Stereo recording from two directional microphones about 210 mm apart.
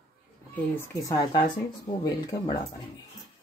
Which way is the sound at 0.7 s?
15° left (ahead or behind).